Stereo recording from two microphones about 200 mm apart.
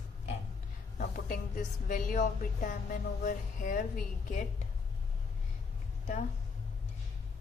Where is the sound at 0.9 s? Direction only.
45° left (ahead or behind).